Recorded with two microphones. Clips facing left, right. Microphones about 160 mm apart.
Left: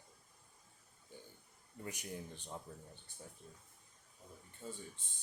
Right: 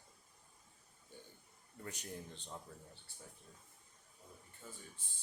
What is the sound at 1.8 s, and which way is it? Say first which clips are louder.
Speech: left 2 dB; 10° left (ahead or behind).